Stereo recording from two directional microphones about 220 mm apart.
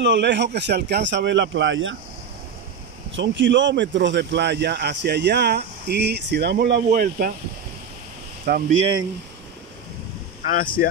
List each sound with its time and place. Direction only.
0.0 s speech: 55° right (ahead or behind)
3.2 s speech: 55° right (ahead or behind); by 7.3 s 40° right (ahead or behind)
8.5 s speech: 40° right (ahead or behind)
10.4 s speech: 40° left (ahead or behind)